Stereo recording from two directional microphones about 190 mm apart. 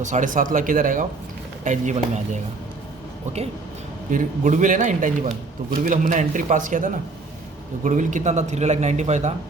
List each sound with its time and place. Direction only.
0.0 s a man's voice: 40° right (ahead or behind)
4.1 s a man's voice: 45° right (ahead or behind)